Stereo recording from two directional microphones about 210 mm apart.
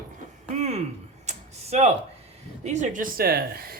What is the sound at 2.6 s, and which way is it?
Speech, 35° right (ahead or behind).